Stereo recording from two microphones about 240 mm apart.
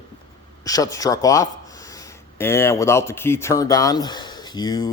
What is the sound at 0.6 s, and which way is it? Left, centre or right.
Speech, centre.